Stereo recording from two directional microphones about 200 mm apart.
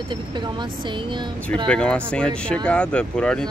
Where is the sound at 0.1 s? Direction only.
25° right (ahead or behind).